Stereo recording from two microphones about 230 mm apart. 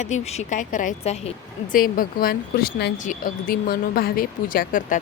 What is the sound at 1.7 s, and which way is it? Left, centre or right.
Speech, left.